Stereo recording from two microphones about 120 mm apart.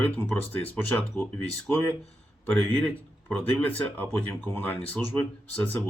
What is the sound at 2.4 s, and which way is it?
Speech, 10° left (ahead or behind).